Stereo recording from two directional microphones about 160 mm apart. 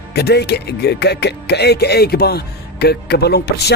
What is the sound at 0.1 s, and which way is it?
Speech, 90° left.